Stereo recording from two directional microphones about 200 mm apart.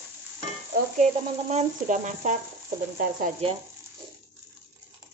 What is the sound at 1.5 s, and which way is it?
Speech, 35° right (ahead or behind).